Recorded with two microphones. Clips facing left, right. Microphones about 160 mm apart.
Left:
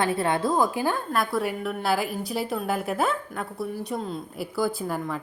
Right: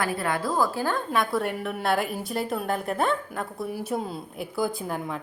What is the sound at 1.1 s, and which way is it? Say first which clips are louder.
A woman's voice: even; centre (ahead or behind).